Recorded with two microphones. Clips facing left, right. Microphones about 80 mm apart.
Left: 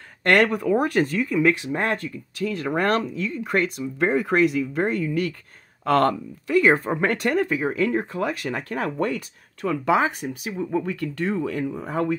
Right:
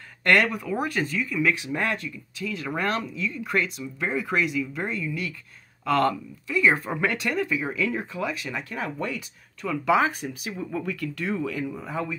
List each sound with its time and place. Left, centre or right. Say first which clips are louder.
0.2 s speech: left 3 dB; left
9.9 s speech: left 1 dB; left
10.8 s speech: left 4 dB; left